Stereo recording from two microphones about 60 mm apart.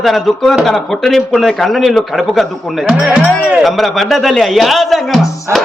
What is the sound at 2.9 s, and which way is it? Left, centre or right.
Speech, right.